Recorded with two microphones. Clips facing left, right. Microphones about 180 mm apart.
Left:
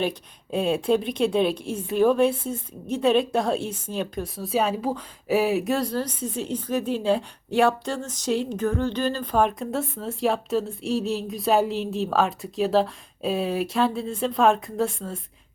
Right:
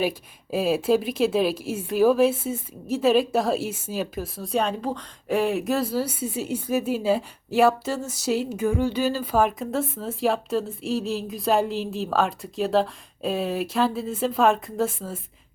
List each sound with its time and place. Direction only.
0.0 s a woman's voice: 5° right (ahead or behind)